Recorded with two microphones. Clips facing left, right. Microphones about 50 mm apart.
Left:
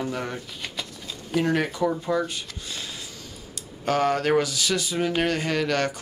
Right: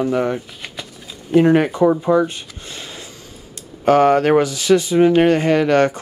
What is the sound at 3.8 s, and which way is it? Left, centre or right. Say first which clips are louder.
Speech: right 10 dB; right.